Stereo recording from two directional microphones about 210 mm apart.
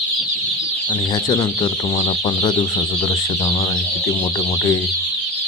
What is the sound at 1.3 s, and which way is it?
Speech, 20° left (ahead or behind).